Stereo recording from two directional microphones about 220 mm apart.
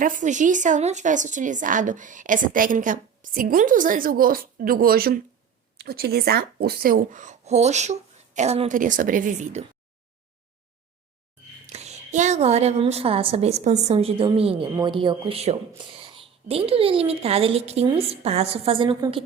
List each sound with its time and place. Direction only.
0.0 s a woman's voice: 35° right (ahead or behind)
11.6 s a woman's voice: 30° right (ahead or behind)